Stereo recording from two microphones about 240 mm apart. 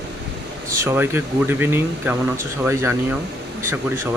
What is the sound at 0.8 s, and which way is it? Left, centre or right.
Speech, centre.